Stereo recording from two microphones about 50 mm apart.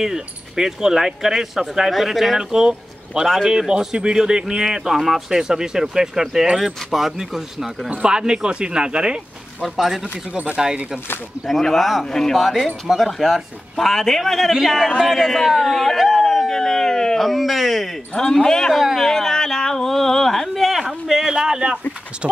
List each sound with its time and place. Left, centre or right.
0.0 s speech: centre
7.9 s speech: centre
9.6 s speech: centre
10.3 s speech: right
11.6 s speech: centre
12.4 s speech: centre
13.7 s speech: centre
18.1 s speech: centre
18.7 s speech: centre
18.9 s speech: centre
21.1 s speech: centre